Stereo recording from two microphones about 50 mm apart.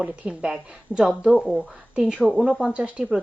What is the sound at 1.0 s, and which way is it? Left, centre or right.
Speech, centre.